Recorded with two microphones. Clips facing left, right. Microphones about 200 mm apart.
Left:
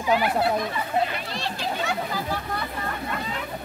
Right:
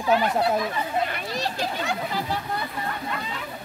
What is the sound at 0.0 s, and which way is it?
Speech, 15° left (ahead or behind).